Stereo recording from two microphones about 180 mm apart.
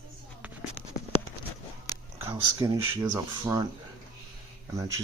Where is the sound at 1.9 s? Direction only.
20° left (ahead or behind).